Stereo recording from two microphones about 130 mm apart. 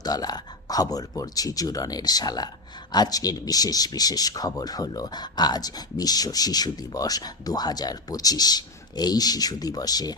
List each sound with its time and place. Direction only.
0.0 s speech: 30° left (ahead or behind)